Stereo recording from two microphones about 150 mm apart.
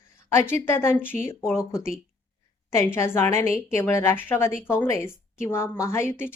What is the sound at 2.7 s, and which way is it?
Speech, 15° left (ahead or behind).